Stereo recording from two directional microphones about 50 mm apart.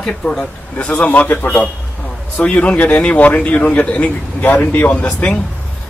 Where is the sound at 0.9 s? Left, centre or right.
Left.